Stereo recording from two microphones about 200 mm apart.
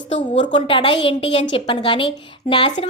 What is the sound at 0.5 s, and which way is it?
A woman's voice, 25° left (ahead or behind).